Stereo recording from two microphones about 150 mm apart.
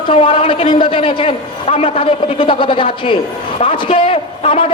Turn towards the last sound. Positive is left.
turn(degrees=40)  # may be behind; listen again after turning